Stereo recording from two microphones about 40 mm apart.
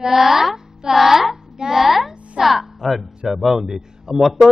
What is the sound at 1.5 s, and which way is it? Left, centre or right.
Speech, centre.